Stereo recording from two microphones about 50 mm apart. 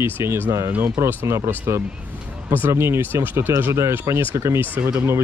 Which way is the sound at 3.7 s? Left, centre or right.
Right.